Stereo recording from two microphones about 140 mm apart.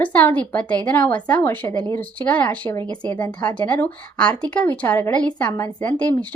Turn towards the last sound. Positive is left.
turn(degrees=10)  # may be behind; listen again after turning